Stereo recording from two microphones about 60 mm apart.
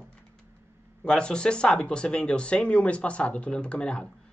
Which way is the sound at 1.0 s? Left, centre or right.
Centre.